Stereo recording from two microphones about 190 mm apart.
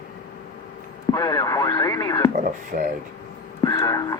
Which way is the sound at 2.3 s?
45° right (ahead or behind).